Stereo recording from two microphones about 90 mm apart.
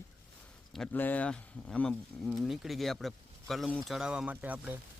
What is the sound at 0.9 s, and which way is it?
Speech, 20° left (ahead or behind).